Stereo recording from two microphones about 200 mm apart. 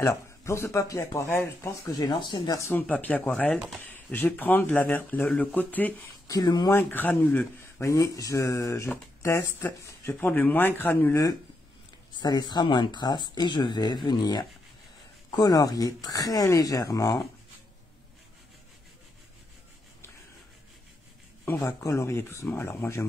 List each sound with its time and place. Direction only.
0.0 s speech: 15° left (ahead or behind)
3.5 s speech: 5° right (ahead or behind)
3.8 s speech: 10° left (ahead or behind)
21.5 s speech: 10° left (ahead or behind)